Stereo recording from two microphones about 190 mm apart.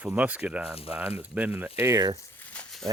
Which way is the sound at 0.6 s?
30° left (ahead or behind).